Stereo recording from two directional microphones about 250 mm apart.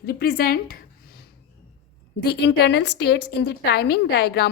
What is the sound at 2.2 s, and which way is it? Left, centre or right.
A woman's voice, left.